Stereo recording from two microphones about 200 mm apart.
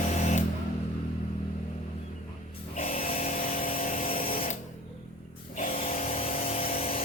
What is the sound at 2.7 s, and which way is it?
Vehicle, 40° left (ahead or behind).